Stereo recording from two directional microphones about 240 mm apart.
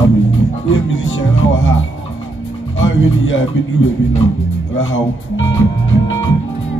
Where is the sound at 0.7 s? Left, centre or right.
Left.